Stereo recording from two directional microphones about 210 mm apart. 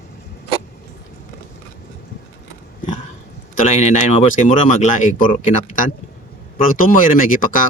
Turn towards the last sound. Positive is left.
turn(degrees=40)  # may be behind; listen again after turning